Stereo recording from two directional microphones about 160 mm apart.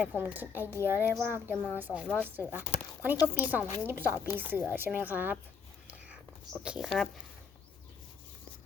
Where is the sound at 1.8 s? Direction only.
10° right (ahead or behind).